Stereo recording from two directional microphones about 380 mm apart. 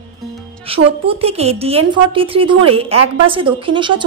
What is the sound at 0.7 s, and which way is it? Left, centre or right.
A woman's voice, centre.